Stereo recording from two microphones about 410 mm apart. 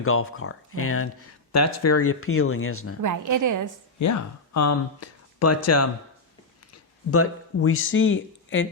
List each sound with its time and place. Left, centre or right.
0.0 s speech: left
3.0 s a woman's voice: right
3.9 s speech: left
7.1 s speech: left